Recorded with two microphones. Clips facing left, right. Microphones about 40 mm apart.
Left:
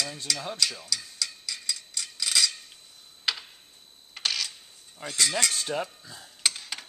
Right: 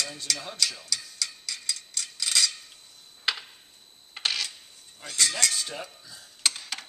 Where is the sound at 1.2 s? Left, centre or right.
Centre.